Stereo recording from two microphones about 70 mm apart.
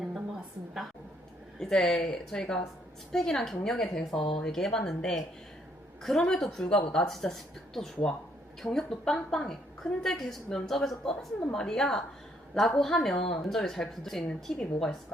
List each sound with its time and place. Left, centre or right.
1.5 s a woman's voice: centre